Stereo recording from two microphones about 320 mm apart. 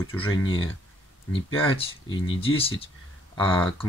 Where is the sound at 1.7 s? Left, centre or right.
Centre.